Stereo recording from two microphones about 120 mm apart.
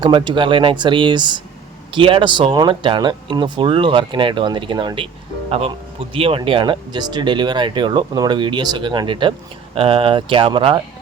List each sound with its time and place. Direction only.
0.0 s speech: 40° right (ahead or behind)
5.5 s speech: 55° right (ahead or behind)